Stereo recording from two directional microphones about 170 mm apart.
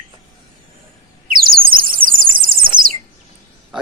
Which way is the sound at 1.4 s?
60° right (ahead or behind).